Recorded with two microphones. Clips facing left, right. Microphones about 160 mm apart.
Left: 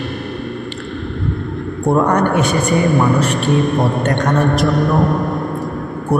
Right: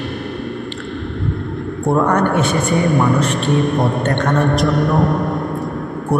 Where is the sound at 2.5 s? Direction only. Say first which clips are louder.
Left 1 dB; centre (ahead or behind).